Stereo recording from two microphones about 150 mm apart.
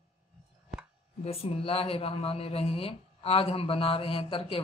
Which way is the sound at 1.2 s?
40° left (ahead or behind).